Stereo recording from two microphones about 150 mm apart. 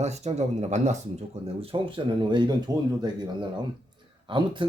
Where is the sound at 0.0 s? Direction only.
45° right (ahead or behind); by 2.6 s 30° right (ahead or behind).